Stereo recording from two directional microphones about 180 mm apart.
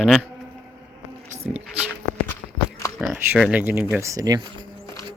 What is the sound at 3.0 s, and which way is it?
Speech, 5° right (ahead or behind).